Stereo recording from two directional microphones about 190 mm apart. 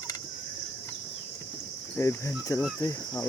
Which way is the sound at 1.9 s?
15° left (ahead or behind).